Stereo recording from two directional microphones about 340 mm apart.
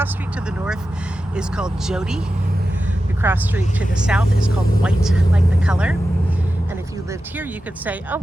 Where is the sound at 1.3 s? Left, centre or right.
Centre.